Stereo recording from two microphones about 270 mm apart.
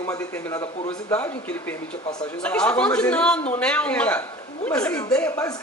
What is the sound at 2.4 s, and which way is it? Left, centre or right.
A man's voice, centre.